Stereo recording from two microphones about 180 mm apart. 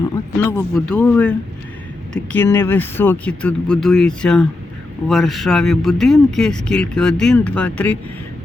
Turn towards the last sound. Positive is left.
turn(degrees=10)  # may be behind; listen again after turning